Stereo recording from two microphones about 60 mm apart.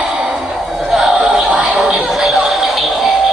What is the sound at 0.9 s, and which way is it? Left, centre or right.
Music, centre.